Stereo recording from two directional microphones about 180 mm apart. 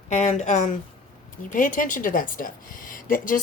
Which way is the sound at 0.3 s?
40° left (ahead or behind).